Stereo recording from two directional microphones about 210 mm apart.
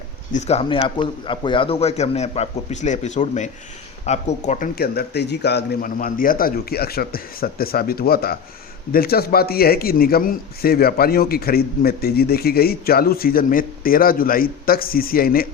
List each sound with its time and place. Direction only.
0.3 s a man's voice: 30° left (ahead or behind)